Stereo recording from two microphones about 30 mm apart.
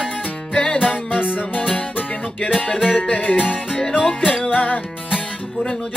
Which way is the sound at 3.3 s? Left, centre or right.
Left.